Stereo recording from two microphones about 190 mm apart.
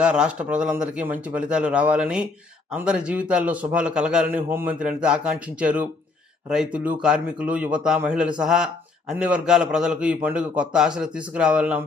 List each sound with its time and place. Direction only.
0.0 s a man's voice: 5° right (ahead or behind)